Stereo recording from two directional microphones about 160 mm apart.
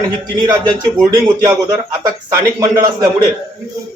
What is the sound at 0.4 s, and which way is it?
A man's voice, 25° right (ahead or behind).